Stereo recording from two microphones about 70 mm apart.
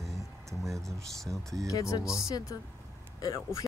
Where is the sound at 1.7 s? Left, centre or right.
Left.